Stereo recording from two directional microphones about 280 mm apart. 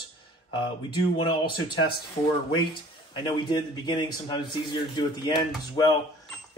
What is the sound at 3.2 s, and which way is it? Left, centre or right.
A man's voice, centre.